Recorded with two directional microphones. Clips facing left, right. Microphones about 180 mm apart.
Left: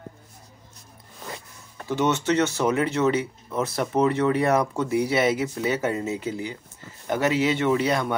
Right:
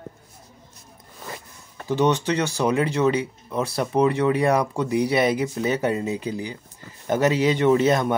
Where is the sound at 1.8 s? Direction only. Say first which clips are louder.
Right 2 dB; 15° right (ahead or behind).